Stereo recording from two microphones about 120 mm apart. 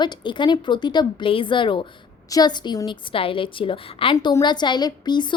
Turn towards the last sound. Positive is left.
turn(degrees=40)  # may be behind; listen again after turning